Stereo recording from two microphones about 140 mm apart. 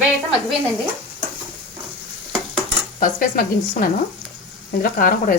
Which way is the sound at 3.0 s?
80° left.